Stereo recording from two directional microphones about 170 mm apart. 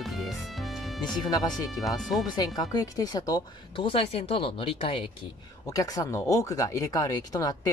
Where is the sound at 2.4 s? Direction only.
20° left (ahead or behind).